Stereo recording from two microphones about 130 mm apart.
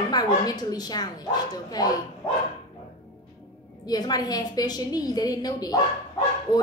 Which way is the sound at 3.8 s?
30° left (ahead or behind).